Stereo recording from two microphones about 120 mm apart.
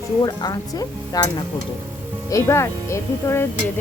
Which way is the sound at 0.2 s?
30° left (ahead or behind).